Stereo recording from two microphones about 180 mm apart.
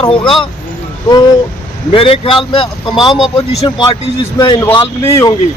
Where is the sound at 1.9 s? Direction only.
30° left (ahead or behind).